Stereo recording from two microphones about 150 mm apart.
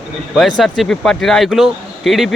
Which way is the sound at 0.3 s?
Centre (ahead or behind).